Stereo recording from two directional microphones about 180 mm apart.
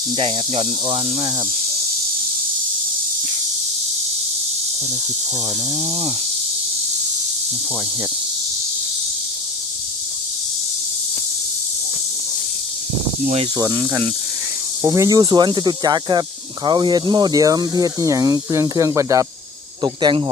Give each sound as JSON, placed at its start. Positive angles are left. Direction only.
{"t": 0.2, "sound": "speech", "side_deg": -30}
{"t": 5.8, "sound": "speech", "side_deg": -35}
{"t": 13.6, "sound": "speech", "side_deg": -20}